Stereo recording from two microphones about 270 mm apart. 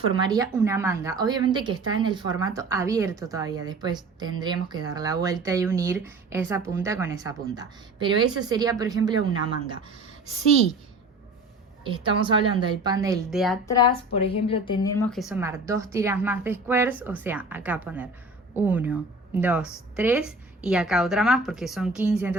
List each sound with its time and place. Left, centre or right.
0.1 s speech: centre
11.8 s speech: centre
13.3 s a woman's voice: centre
13.7 s speech: centre
15.1 s a woman's voice: centre